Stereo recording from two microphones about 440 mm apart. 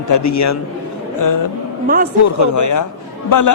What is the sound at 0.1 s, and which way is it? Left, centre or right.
A man's voice, left.